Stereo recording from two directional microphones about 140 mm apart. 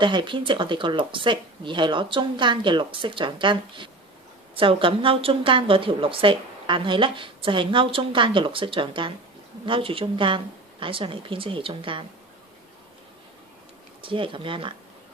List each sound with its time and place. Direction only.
0.0 s speech: 35° right (ahead or behind)
14.0 s speech: 35° right (ahead or behind)